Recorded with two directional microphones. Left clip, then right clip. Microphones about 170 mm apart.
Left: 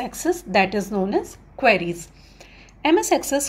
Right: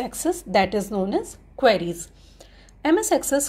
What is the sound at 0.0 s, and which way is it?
A woman's voice, 30° right (ahead or behind).